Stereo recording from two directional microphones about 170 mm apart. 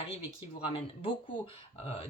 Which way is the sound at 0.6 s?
35° left (ahead or behind).